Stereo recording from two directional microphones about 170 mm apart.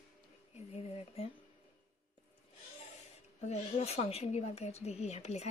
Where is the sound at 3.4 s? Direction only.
35° left (ahead or behind).